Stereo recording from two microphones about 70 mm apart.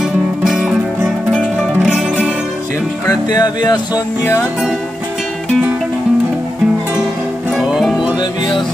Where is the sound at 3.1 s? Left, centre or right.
Left.